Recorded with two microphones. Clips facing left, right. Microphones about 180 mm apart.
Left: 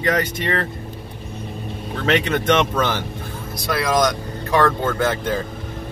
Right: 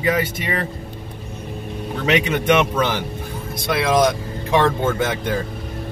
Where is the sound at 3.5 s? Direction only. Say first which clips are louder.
Right 2 dB; 25° right (ahead or behind).